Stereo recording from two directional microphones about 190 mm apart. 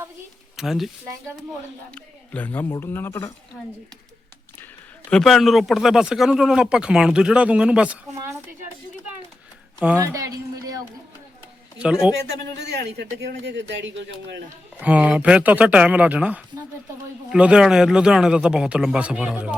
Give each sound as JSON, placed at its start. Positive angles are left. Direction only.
{"t": 0.5, "sound": "speech", "side_deg": 0}
{"t": 2.0, "sound": "speech", "side_deg": 10}
{"t": 5.0, "sound": "speech", "side_deg": 5}
{"t": 9.8, "sound": "speech", "side_deg": -10}
{"t": 11.8, "sound": "speech", "side_deg": -5}
{"t": 12.3, "sound": "speech", "side_deg": -60}
{"t": 14.8, "sound": "speech", "side_deg": -5}